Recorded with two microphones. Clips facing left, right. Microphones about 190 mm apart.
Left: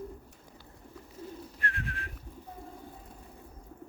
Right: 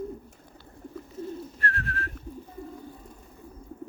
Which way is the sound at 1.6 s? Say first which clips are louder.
Right 3 dB; 15° left (ahead or behind).